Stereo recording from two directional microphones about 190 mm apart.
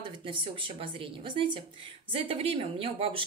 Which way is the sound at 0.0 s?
25° right (ahead or behind).